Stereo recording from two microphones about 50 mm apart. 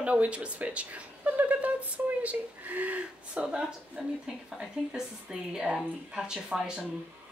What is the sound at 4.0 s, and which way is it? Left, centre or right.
Speech, centre.